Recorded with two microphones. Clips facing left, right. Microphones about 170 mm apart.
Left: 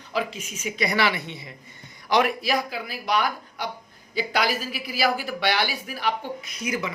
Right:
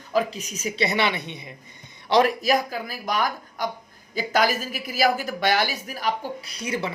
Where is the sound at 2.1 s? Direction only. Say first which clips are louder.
Right 3 dB; 35° right (ahead or behind).